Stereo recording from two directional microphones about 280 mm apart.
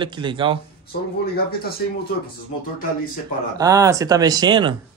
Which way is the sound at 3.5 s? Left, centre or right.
Centre.